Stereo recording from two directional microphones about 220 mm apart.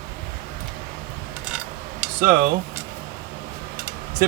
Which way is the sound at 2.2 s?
40° right (ahead or behind).